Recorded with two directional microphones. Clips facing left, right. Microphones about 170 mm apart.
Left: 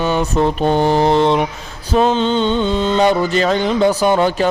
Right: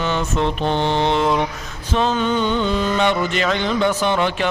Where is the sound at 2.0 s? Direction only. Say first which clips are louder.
Left 4 dB; 25° left (ahead or behind).